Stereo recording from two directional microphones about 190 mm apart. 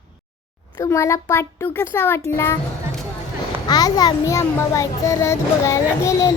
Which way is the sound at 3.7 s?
20° left (ahead or behind).